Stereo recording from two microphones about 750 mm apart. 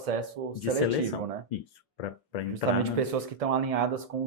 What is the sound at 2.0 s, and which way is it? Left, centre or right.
Speech, left.